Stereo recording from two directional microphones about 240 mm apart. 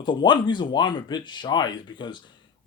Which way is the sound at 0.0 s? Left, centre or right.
Centre.